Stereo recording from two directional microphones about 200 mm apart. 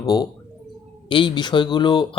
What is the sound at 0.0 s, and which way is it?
Speech, 20° left (ahead or behind).